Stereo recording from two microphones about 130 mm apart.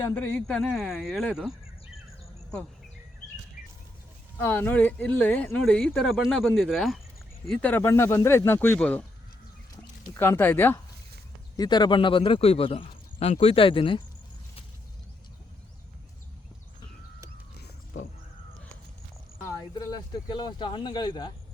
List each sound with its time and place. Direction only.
0.1 s speech: 15° left (ahead or behind); by 1.5 s 5° right (ahead or behind)
4.4 s speech: 15° left (ahead or behind)
10.2 s speech: 20° left (ahead or behind)
11.5 s speech: 30° left (ahead or behind)
20.2 s speech: 35° left (ahead or behind)